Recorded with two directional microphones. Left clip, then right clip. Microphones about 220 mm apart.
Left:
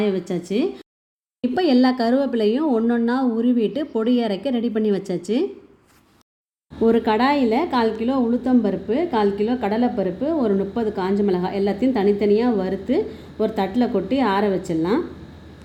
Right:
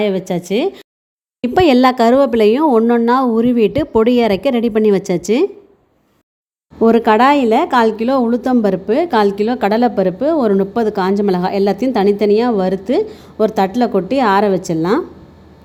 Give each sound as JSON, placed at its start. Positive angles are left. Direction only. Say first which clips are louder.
{"t": 0.0, "sound": "speech", "louder": "right 6 dB", "side_deg": -45}
{"t": 6.7, "sound": "speech", "louder": "right 7 dB", "side_deg": -35}